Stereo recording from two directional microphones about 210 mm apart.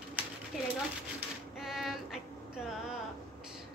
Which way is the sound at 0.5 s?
5° right (ahead or behind).